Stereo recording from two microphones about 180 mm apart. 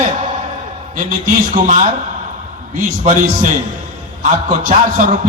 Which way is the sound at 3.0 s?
45° right (ahead or behind).